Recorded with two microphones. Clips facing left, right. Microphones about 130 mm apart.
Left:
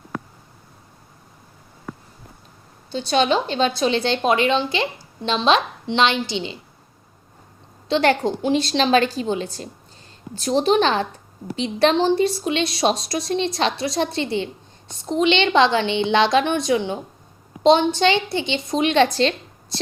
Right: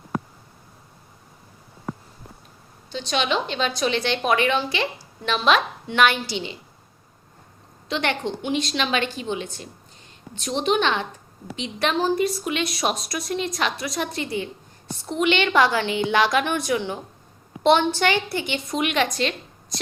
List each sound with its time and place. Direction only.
2.9 s a woman's voice: 35° left (ahead or behind)
7.9 s a woman's voice: 35° left (ahead or behind)